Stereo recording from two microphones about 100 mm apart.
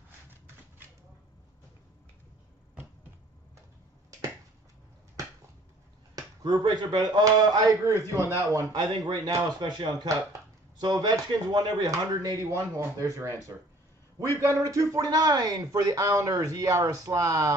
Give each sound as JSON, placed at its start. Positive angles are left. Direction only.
{"t": 6.4, "sound": "speech", "side_deg": -50}
{"t": 9.0, "sound": "speech", "side_deg": -45}